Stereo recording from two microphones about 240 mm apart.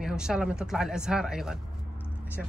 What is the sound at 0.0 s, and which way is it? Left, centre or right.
A woman's voice, centre.